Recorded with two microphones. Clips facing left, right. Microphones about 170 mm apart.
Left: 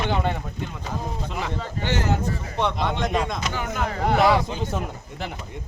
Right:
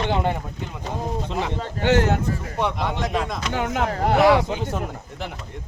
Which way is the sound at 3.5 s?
65° right (ahead or behind).